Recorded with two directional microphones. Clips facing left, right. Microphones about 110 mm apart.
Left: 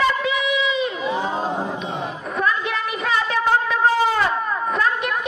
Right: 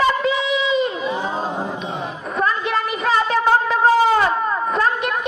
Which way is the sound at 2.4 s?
35° right (ahead or behind).